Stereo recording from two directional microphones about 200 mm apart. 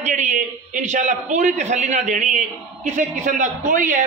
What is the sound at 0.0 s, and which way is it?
A man's voice, 35° right (ahead or behind).